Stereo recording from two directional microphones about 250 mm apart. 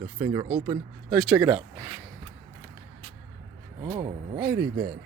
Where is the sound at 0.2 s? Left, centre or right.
Centre.